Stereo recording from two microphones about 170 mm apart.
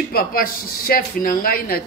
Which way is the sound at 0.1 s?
60° left (ahead or behind).